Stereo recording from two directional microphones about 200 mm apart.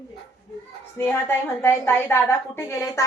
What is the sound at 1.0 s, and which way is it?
A woman's voice, 10° left (ahead or behind).